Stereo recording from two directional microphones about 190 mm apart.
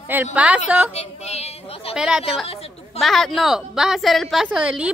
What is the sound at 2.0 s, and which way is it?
A woman's voice, 5° right (ahead or behind).